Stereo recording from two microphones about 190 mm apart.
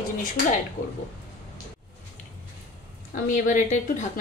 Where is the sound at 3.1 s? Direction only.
40° left (ahead or behind).